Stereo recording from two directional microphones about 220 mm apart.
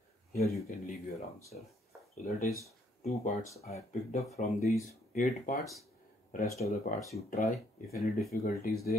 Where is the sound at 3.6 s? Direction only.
30° left (ahead or behind).